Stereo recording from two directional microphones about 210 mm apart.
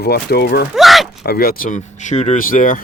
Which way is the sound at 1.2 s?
45° left (ahead or behind).